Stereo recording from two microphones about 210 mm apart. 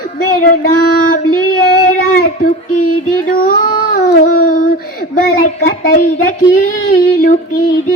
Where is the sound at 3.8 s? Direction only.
45° left (ahead or behind).